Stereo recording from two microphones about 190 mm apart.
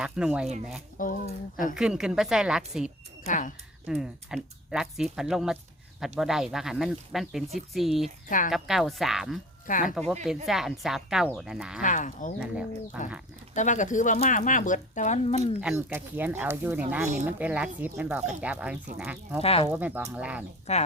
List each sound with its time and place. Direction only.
0.0 s speech: 5° right (ahead or behind)
1.0 s speech: 45° left (ahead or behind)
1.7 s speech: 5° right (ahead or behind)
3.2 s speech: 45° left (ahead or behind)
3.8 s speech: 5° right (ahead or behind)
11.8 s speech: 45° left (ahead or behind)
12.4 s speech: 5° right (ahead or behind)
13.5 s speech: 40° left (ahead or behind)
15.7 s speech: 10° right (ahead or behind)
19.4 s speech: 30° left (ahead or behind)
19.7 s speech: 10° right (ahead or behind)
20.7 s speech: 35° left (ahead or behind)